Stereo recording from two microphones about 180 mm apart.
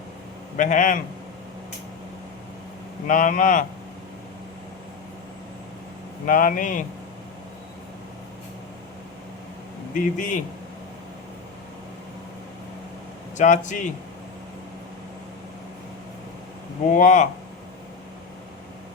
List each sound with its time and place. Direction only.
0.5 s speech: 45° left (ahead or behind)
3.1 s speech: 45° left (ahead or behind)
6.2 s speech: 50° left (ahead or behind)
9.9 s speech: 45° left (ahead or behind)
13.3 s speech: 45° left (ahead or behind)
16.9 s speech: 45° left (ahead or behind)